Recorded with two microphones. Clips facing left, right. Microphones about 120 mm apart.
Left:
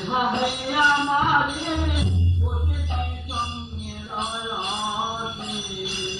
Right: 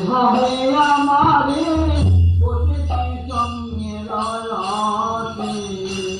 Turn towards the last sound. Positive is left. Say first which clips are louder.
# right 8 dB
turn(degrees=-45)  # may be behind; listen again after turning